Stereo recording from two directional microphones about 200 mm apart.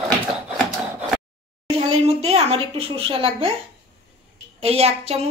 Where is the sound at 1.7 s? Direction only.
30° right (ahead or behind).